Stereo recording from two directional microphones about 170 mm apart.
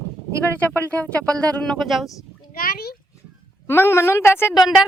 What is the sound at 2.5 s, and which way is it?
Speech, 60° left (ahead or behind).